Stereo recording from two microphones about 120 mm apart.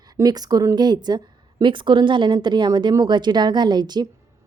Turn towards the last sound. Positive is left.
turn(degrees=-35)  # may be behind; listen again after turning